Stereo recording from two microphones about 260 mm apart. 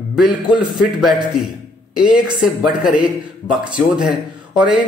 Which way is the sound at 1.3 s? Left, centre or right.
Centre.